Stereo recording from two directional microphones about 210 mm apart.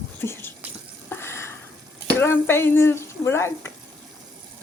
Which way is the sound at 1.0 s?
10° left (ahead or behind).